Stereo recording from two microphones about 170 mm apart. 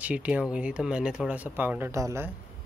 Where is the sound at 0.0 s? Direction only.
10° right (ahead or behind).